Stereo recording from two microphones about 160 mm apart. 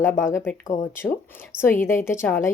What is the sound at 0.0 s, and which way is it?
Speech, 15° left (ahead or behind).